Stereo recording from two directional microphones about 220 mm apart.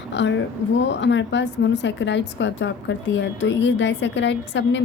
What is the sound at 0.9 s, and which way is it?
A woman's voice, 55° left (ahead or behind).